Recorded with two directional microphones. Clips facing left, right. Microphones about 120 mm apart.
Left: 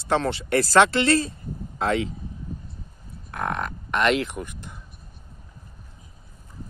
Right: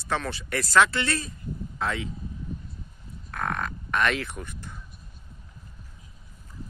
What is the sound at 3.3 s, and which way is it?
Grunt, 20° left (ahead or behind).